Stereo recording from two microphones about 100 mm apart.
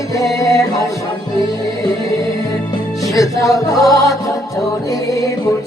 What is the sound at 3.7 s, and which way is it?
Music, 35° left (ahead or behind).